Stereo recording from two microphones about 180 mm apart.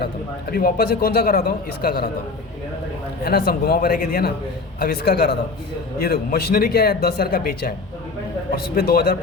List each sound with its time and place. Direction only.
0.6 s speech: 60° left (ahead or behind)
3.2 s speech: 60° left (ahead or behind)
8.7 s speech: 60° left (ahead or behind)